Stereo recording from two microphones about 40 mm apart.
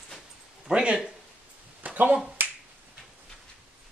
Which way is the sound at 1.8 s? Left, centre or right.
Right.